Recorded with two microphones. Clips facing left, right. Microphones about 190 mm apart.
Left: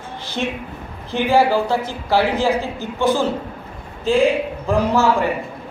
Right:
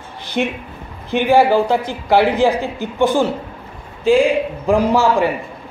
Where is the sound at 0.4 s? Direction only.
15° right (ahead or behind).